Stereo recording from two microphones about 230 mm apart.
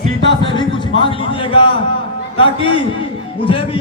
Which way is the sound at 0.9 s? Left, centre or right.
Left.